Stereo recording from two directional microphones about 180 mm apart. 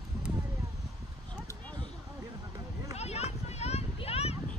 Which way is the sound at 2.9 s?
35° left (ahead or behind).